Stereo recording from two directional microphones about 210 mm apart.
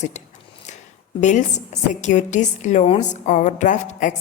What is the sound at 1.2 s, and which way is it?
A woman's voice, 35° left (ahead or behind).